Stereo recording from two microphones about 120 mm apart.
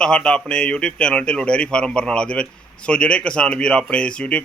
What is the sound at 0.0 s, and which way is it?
Speech, 5° left (ahead or behind).